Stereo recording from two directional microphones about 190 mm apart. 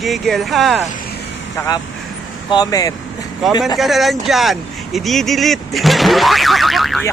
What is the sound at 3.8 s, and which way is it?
Speech, centre (ahead or behind).